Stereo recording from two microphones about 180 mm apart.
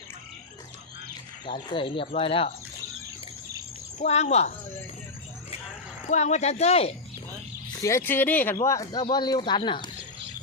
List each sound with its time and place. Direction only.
1.7 s speech: 30° left (ahead or behind)
3.9 s speech: 40° left (ahead or behind)
6.1 s speech: 40° left (ahead or behind)
7.8 s speech: 15° left (ahead or behind)